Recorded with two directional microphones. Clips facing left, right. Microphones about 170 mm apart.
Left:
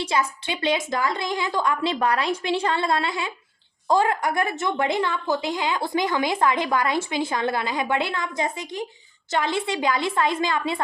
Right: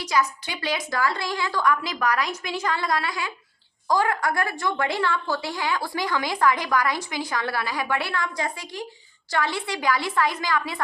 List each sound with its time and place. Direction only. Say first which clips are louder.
0.0 s a woman's voice: even; 25° left (ahead or behind)